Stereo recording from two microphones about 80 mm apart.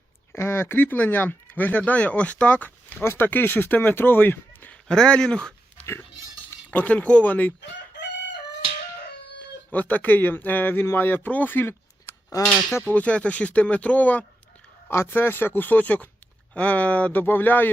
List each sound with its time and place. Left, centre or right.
0.3 s speech: left
4.9 s speech: centre
5.8 s a sound: left
6.7 s speech: centre
9.7 s speech: left
12.4 s speech: left
12.9 s speech: centre
14.8 s speech: left